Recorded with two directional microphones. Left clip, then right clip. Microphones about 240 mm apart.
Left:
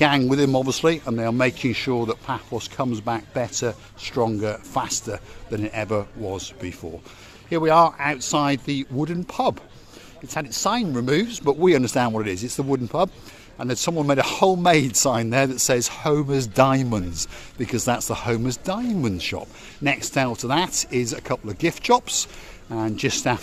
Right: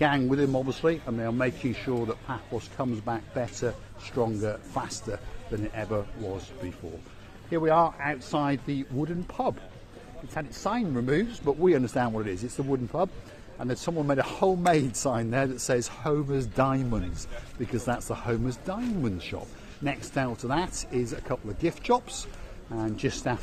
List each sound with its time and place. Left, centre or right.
0.0 s speech: left